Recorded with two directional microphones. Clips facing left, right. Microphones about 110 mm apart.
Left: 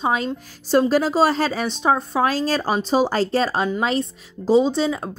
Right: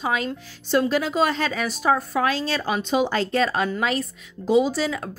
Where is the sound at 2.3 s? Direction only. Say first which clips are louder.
Left 3 dB; 40° left (ahead or behind).